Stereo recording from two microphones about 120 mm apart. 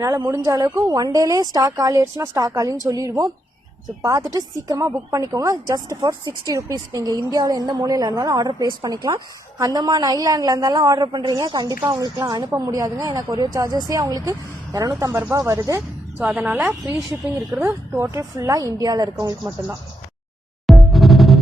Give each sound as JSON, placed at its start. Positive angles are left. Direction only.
{"t": 0.0, "sound": "a woman's voice", "side_deg": -30}
{"t": 16.1, "sound": "speech", "side_deg": -10}
{"t": 16.6, "sound": "speech", "side_deg": -20}
{"t": 20.7, "sound": "music", "side_deg": 0}